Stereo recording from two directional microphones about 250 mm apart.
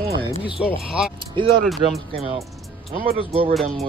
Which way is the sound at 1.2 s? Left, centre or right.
Centre.